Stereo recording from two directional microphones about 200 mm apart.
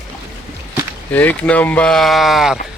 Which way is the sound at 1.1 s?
5° left (ahead or behind).